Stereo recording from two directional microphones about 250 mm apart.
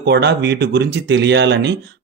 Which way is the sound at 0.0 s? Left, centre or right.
Right.